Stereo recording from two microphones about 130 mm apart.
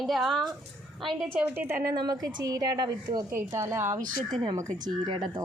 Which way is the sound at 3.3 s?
20° right (ahead or behind).